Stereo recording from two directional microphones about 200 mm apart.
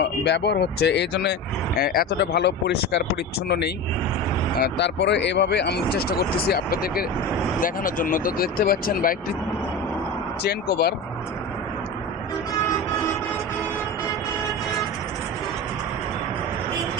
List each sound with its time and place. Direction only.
0.3 s speech: 55° left (ahead or behind)
4.5 s speech: 55° left (ahead or behind)
10.4 s speech: 50° left (ahead or behind)